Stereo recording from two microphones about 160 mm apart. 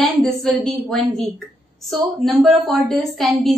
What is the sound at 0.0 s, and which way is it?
A woman's voice, 5° left (ahead or behind).